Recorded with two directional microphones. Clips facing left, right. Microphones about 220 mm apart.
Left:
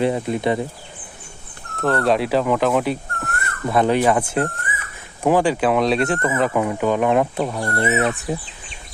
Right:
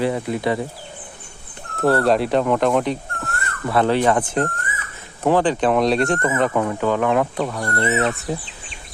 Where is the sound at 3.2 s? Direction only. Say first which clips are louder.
Left 1 dB; 15° left (ahead or behind).